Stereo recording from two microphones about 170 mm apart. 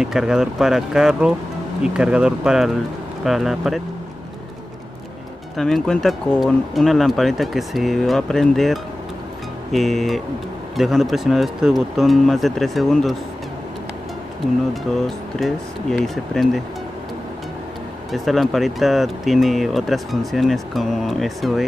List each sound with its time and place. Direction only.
0.0 s speech: 5° right (ahead or behind)
5.6 s speech: centre (ahead or behind)
14.7 s speech: centre (ahead or behind)
18.1 s speech: centre (ahead or behind)